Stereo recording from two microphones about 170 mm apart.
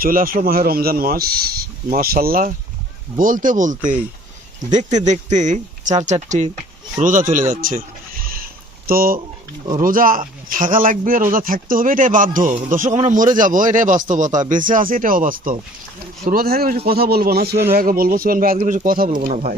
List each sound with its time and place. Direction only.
0.0 s speech: 55° right (ahead or behind)
4.8 s speech: 45° right (ahead or behind)